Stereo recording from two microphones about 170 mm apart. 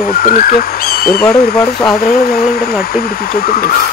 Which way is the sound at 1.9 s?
60° left (ahead or behind).